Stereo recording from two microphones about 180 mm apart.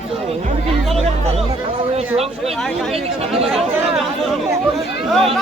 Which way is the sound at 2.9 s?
35° right (ahead or behind).